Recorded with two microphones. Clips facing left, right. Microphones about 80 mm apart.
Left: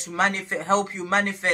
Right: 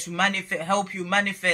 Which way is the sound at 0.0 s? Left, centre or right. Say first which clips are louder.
Left 1 dB; left.